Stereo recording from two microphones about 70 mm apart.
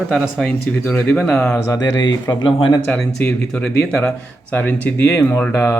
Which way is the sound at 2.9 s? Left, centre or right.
Centre.